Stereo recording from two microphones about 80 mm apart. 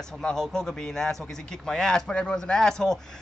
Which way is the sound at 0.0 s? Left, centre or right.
Centre.